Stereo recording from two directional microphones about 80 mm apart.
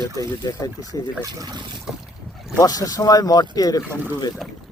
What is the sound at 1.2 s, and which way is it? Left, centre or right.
Speech, right.